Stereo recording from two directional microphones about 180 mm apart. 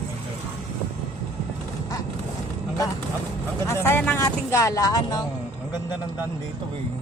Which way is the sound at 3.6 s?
15° left (ahead or behind).